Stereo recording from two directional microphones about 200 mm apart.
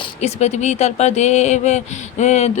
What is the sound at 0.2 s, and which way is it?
Speech, 35° left (ahead or behind).